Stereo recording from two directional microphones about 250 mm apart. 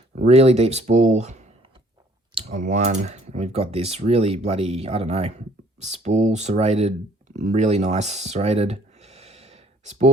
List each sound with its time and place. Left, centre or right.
0.2 s speech: right